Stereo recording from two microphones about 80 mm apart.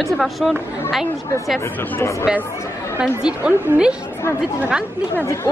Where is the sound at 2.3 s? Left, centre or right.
Centre.